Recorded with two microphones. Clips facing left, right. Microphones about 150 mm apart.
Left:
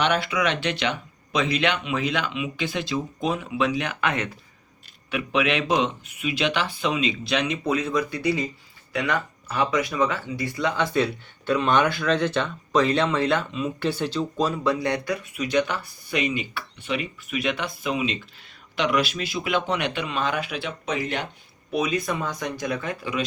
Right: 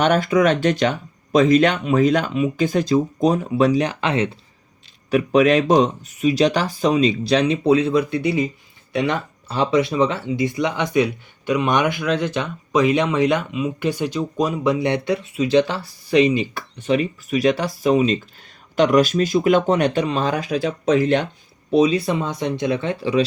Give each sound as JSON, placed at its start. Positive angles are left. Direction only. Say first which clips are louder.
{"t": 0.0, "sound": "speech", "louder": "right 7 dB", "side_deg": -45}
{"t": 5.1, "sound": "speech", "louder": "right 9 dB", "side_deg": -40}
{"t": 21.7, "sound": "speech", "louder": "right 8 dB", "side_deg": -30}